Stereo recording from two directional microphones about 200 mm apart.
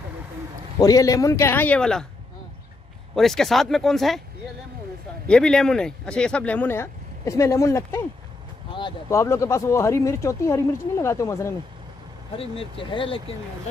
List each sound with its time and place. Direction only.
0.7 s speech: 15° left (ahead or behind)
3.2 s speech: centre (ahead or behind)
5.3 s speech: 5° left (ahead or behind)
12.4 s speech: 25° left (ahead or behind)